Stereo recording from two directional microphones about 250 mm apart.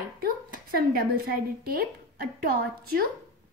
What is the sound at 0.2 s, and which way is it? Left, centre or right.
A woman's voice, right.